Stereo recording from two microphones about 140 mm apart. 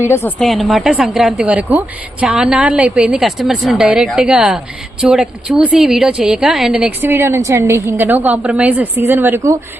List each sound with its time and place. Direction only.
0.1 s a woman's voice: 20° left (ahead or behind)
0.3 s a woman's voice: centre (ahead or behind); by 9.6 s 20° right (ahead or behind)